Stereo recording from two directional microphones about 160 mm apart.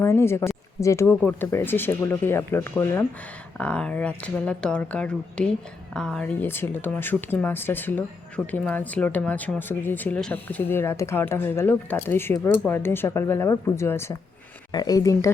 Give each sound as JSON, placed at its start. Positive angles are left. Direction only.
{"t": 0.0, "sound": "speech", "side_deg": 15}